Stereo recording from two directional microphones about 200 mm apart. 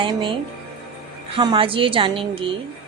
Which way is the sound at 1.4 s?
25° right (ahead or behind).